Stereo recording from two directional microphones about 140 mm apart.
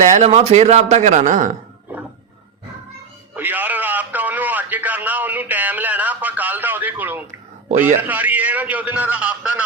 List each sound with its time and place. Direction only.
0.0 s a man's voice: 60° right (ahead or behind)
3.3 s a man's voice: 15° right (ahead or behind)